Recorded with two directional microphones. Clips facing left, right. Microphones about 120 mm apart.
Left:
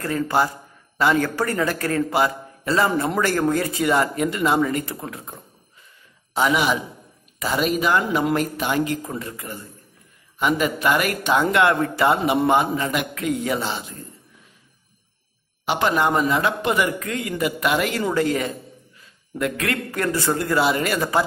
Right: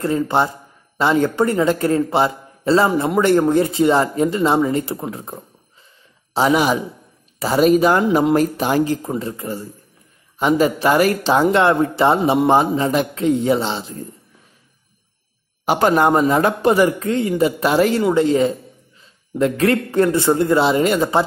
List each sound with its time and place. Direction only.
0.0 s speech: 25° right (ahead or behind)
15.6 s speech: 40° right (ahead or behind); by 21.2 s 25° right (ahead or behind)